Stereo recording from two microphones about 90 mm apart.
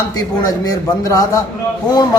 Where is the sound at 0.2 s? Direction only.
45° left (ahead or behind).